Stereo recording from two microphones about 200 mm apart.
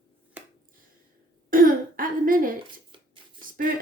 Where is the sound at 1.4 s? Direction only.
45° right (ahead or behind).